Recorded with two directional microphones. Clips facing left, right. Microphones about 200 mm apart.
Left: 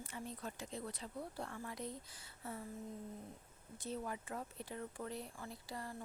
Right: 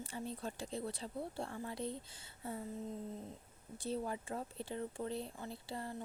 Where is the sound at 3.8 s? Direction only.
30° right (ahead or behind).